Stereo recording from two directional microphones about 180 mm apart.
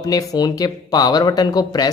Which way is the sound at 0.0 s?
20° left (ahead or behind).